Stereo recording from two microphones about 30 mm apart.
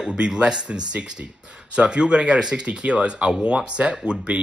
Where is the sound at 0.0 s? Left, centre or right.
Right.